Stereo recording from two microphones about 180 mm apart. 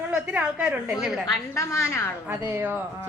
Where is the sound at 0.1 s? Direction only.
5° right (ahead or behind).